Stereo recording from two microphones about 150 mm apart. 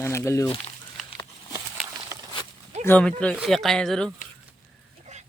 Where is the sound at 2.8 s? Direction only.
10° left (ahead or behind).